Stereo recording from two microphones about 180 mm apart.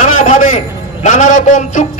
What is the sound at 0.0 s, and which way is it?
A man's voice, 45° left (ahead or behind).